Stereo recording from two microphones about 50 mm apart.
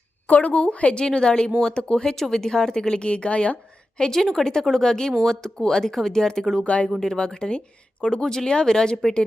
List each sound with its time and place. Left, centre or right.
0.3 s a woman's voice: left; by 6.4 s centre
6.6 s a woman's voice: left